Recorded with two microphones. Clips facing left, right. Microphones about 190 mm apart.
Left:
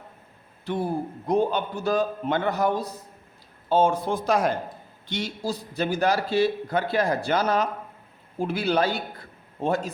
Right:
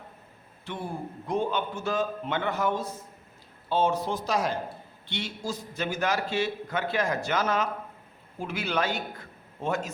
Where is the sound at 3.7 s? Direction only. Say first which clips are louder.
Left 4 dB; 50° left (ahead or behind).